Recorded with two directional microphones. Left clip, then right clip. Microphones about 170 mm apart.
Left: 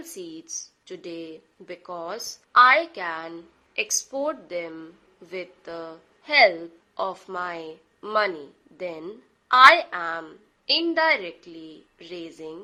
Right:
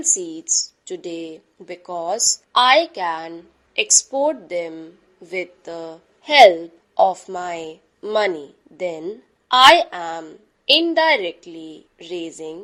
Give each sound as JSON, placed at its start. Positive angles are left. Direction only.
{"t": 0.0, "sound": "a woman's voice", "side_deg": -25}